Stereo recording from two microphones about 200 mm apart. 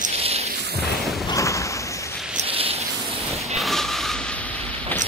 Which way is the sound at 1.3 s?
15° left (ahead or behind).